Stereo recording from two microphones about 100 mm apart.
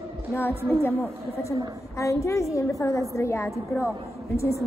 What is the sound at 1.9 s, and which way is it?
A woman's voice, 30° left (ahead or behind).